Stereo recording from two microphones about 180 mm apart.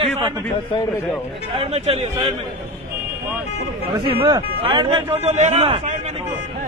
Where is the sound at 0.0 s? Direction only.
35° right (ahead or behind).